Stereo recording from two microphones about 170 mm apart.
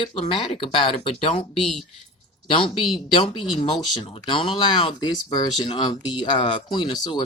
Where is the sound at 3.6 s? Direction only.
35° left (ahead or behind).